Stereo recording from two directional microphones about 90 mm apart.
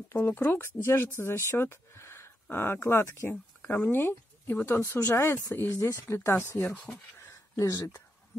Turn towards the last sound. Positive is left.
turn(degrees=35)  # may be behind; listen again after turning